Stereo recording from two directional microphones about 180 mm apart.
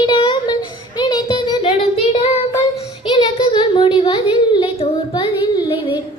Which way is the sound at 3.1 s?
25° left (ahead or behind).